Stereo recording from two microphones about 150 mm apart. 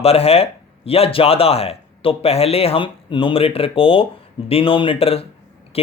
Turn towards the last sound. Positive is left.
turn(degrees=40)  # may be behind; listen again after turning